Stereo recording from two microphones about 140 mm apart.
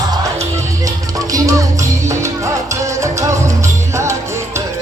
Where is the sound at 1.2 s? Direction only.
25° right (ahead or behind).